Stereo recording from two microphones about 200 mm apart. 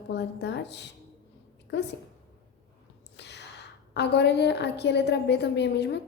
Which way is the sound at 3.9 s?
55° left (ahead or behind).